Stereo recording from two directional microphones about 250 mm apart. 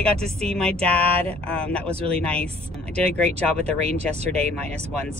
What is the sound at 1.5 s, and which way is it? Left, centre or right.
Speech, centre.